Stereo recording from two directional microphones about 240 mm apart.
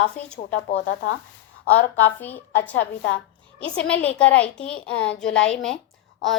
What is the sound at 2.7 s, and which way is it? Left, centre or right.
Speech, left.